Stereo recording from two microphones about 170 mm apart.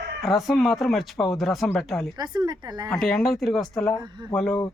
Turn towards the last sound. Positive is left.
turn(degrees=5)  # may be behind; listen again after turning